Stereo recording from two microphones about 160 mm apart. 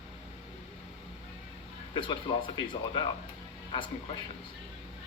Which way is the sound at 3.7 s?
30° left (ahead or behind).